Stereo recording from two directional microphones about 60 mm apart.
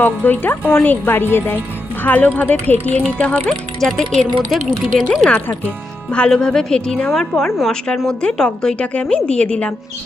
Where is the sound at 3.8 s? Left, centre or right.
Centre.